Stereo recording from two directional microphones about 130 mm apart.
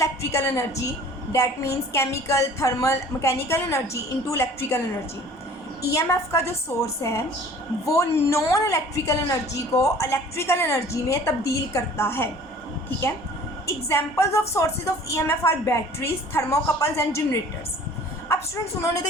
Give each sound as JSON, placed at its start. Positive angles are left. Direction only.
{"t": 0.0, "sound": "a woman's voice", "side_deg": 20}
{"t": 5.8, "sound": "a woman's voice", "side_deg": 20}
{"t": 13.7, "sound": "a woman's voice", "side_deg": 20}
{"t": 18.3, "sound": "a woman's voice", "side_deg": 25}